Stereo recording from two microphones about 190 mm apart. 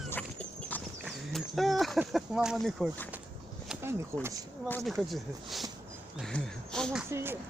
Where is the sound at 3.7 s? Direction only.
15° right (ahead or behind).